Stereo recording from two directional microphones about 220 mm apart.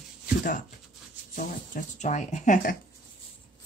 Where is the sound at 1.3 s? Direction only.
35° left (ahead or behind).